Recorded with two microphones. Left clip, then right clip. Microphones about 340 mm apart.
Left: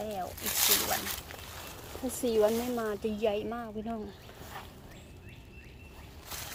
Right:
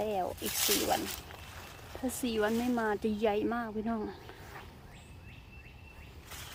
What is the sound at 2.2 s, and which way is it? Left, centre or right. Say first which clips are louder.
Speech: left 5 dB; centre.